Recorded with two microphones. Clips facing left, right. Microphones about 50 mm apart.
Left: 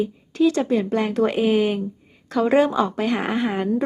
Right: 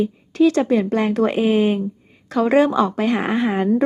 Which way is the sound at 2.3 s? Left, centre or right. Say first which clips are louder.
Right 2 dB; right.